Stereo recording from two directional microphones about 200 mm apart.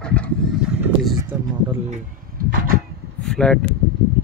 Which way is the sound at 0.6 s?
5° right (ahead or behind).